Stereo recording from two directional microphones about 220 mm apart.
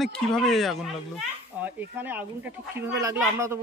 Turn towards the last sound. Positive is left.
turn(degrees=-10)  # may be behind; listen again after turning